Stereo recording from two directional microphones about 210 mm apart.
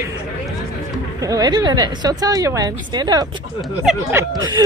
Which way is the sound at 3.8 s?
5° right (ahead or behind).